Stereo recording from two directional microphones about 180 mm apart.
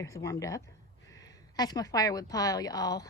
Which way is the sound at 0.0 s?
15° left (ahead or behind).